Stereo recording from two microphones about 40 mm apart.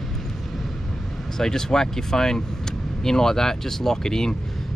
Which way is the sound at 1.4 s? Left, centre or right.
Centre.